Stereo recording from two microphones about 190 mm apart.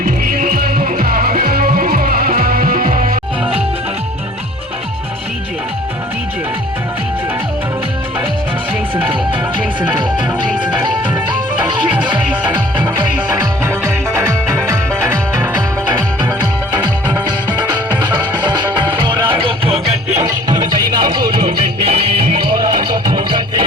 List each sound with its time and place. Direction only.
0.0 s music: 45° right (ahead or behind)
11.7 s music: 25° right (ahead or behind)
12.3 s music: 10° right (ahead or behind); by 20.2 s 35° right (ahead or behind)
20.2 s music: 20° right (ahead or behind)